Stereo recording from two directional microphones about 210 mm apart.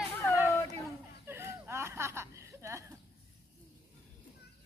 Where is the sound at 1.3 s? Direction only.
10° right (ahead or behind).